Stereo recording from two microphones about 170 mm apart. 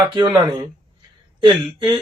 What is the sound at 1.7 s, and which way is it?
Speech, 30° right (ahead or behind).